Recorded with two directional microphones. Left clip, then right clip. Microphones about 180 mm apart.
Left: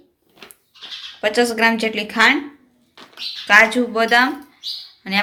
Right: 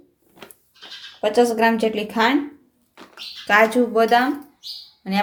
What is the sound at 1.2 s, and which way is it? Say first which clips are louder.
A woman's voice: even; 25° right (ahead or behind).